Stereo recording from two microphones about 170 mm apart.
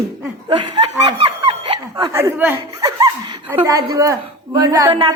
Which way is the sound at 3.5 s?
20° right (ahead or behind).